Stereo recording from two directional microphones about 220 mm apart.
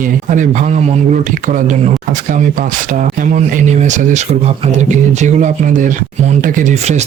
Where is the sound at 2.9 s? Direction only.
35° right (ahead or behind).